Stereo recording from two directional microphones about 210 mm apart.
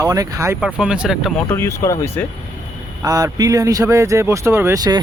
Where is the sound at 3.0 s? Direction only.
15° right (ahead or behind).